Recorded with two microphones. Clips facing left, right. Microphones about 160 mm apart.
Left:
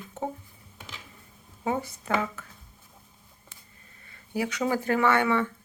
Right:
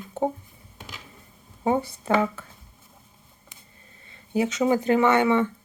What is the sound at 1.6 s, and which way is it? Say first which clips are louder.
Speech: right 6 dB; 30° right (ahead or behind).